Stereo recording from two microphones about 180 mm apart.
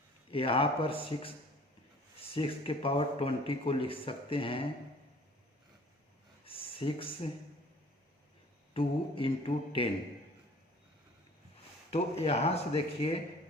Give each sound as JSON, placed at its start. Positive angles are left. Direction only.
{"t": 0.3, "sound": "speech", "side_deg": 30}
{"t": 6.4, "sound": "speech", "side_deg": 30}
{"t": 8.7, "sound": "speech", "side_deg": 30}
{"t": 11.9, "sound": "speech", "side_deg": 35}